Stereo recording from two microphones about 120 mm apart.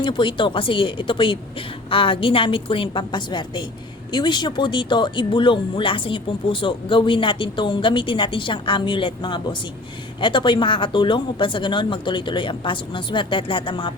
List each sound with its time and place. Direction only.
0.0 s speech: 45° left (ahead or behind)